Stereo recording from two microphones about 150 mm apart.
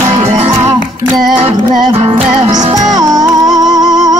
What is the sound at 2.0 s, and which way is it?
Music, 40° right (ahead or behind).